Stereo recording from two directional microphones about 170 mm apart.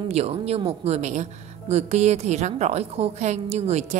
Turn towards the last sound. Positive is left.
turn(degrees=-40)  # may be behind; listen again after turning